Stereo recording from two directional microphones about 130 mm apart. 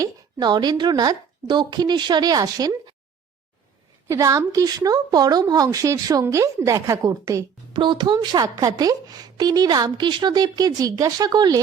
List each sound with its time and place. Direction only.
0.0 s a woman's voice: 35° right (ahead or behind)
4.1 s a woman's voice: 25° right (ahead or behind)
7.7 s a woman's voice: 40° right (ahead or behind)